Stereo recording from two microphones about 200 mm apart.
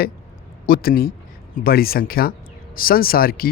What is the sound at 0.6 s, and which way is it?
A man's voice, 50° left (ahead or behind).